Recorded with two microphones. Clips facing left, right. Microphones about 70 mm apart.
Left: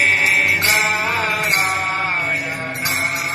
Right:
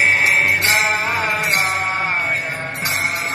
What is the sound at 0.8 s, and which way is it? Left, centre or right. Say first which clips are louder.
Music: even; right.